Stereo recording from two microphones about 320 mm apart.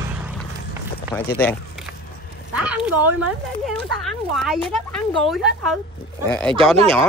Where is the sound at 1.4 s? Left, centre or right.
Centre.